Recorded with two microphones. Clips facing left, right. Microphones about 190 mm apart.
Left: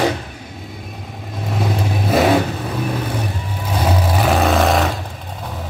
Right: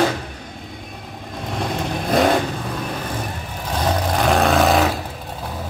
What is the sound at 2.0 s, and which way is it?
Vehicle, 5° left (ahead or behind).